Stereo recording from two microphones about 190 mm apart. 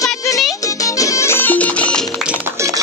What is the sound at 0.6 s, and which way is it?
Music, 15° left (ahead or behind).